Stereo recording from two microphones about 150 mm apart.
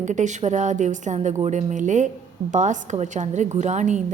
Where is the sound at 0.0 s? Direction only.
55° right (ahead or behind).